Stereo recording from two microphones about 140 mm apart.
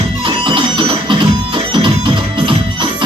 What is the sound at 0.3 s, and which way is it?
Music, 35° right (ahead or behind).